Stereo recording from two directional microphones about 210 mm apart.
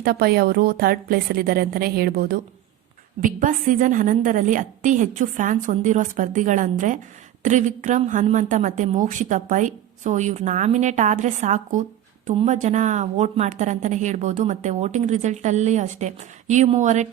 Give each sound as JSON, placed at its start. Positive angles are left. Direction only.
{"t": 0.0, "sound": "a woman's voice", "side_deg": -45}